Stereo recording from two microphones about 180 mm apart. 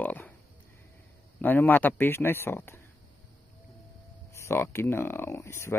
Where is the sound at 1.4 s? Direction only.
10° left (ahead or behind).